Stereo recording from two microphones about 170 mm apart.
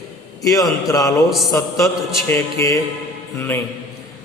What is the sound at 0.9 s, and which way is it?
Speech, 20° left (ahead or behind).